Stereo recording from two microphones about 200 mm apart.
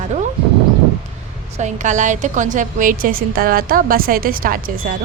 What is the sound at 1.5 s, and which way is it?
A woman's voice, 35° right (ahead or behind).